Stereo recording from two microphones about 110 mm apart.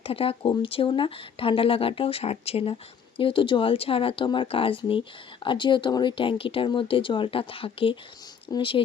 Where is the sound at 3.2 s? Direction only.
50° left (ahead or behind).